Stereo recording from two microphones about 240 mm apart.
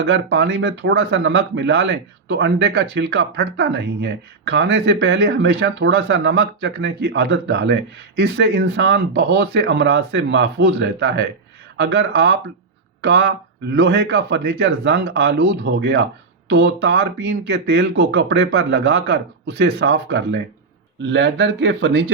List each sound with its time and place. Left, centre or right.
0.0 s speech: right